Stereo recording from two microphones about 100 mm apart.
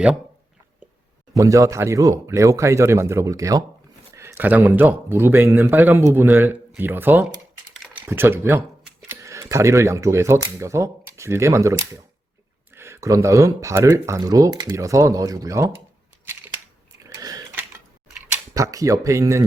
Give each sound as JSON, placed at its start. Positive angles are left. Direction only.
{"t": 1.4, "sound": "speech", "side_deg": -35}
{"t": 17.1, "sound": "sewing machine", "side_deg": -40}
{"t": 18.3, "sound": "speech", "side_deg": -35}